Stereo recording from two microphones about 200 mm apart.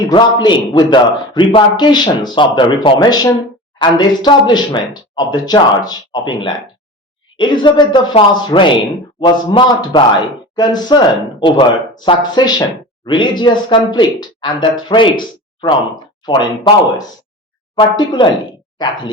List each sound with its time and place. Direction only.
0.1 s speech: 20° left (ahead or behind)
16.2 s speech: 20° left (ahead or behind)